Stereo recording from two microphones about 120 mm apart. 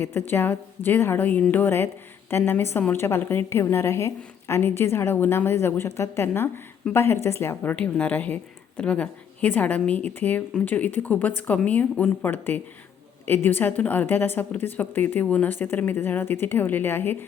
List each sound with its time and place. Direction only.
0.0 s a woman's voice: 20° left (ahead or behind)